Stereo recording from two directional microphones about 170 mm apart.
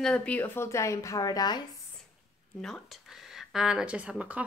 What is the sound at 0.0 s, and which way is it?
Speech, 5° left (ahead or behind).